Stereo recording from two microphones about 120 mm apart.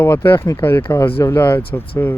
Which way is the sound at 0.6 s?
15° left (ahead or behind).